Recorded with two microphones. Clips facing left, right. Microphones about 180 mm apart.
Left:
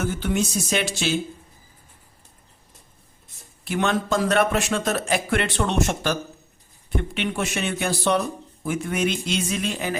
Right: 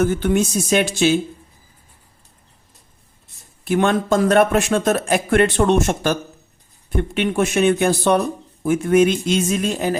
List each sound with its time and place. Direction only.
0.0 s speech: 50° right (ahead or behind)
3.6 s speech: 50° right (ahead or behind)